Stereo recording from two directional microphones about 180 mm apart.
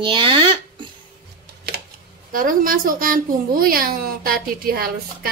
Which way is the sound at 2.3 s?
50° right (ahead or behind).